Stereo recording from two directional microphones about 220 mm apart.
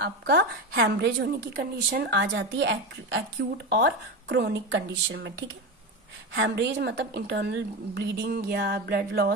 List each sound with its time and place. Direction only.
0.0 s a woman's voice: 50° right (ahead or behind)
6.3 s a woman's voice: 55° right (ahead or behind)